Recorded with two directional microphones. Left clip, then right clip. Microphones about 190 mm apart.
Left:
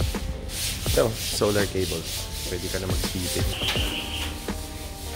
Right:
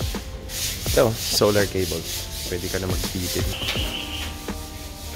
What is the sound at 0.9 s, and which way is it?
Rub, 30° right (ahead or behind).